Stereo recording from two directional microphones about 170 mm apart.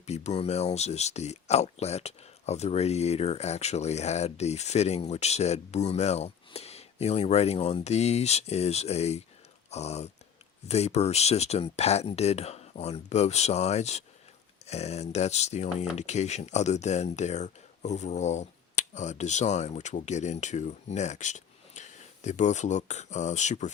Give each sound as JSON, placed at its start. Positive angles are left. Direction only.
{"t": 0.0, "sound": "speech", "side_deg": 40}
{"t": 9.6, "sound": "a sound", "side_deg": 40}
{"t": 10.7, "sound": "speech", "side_deg": 40}